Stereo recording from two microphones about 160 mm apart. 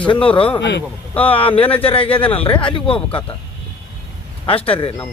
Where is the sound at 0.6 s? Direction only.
90° left.